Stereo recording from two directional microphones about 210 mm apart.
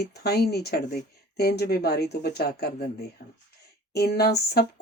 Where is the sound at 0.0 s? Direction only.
50° left (ahead or behind).